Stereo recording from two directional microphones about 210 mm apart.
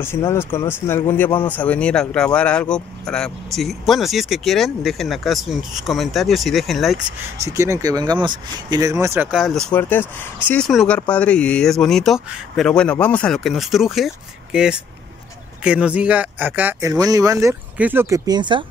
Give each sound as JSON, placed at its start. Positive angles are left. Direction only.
{"t": 0.0, "sound": "speech", "side_deg": 10}
{"t": 7.1, "sound": "speech", "side_deg": -30}
{"t": 7.5, "sound": "speech", "side_deg": -15}
{"t": 9.7, "sound": "speech", "side_deg": 10}